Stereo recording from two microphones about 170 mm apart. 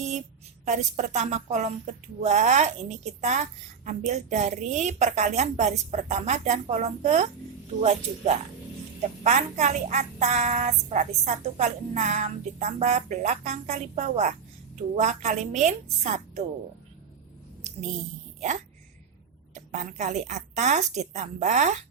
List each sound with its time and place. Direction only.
0.6 s speech: 45° right (ahead or behind)
18.3 s speech: 45° right (ahead or behind)